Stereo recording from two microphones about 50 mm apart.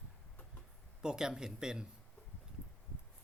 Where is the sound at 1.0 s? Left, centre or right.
Centre.